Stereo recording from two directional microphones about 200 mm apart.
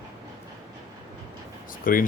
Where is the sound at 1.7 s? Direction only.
45° left (ahead or behind).